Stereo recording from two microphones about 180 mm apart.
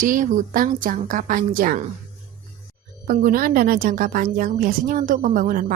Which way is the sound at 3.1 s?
50° right (ahead or behind).